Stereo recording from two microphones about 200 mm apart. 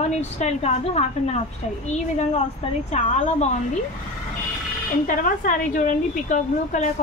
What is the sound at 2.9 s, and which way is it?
Speech, 35° left (ahead or behind).